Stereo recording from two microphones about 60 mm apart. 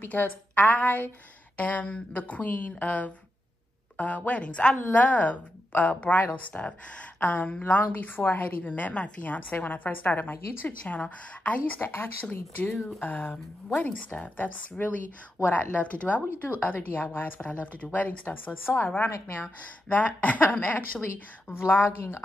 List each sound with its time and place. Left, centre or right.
0.0 s a woman's voice: left
6.5 s a woman's voice: left
10.8 s a woman's voice: left
19.9 s a woman's voice: left
21.0 s a woman's voice: left